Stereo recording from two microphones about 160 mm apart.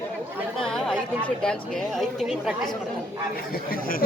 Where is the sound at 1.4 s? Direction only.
5° left (ahead or behind).